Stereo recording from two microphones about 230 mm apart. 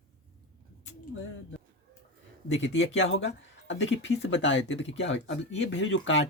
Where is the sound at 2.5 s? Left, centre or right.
Left.